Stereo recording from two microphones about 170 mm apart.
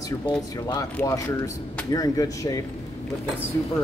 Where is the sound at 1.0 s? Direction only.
20° left (ahead or behind).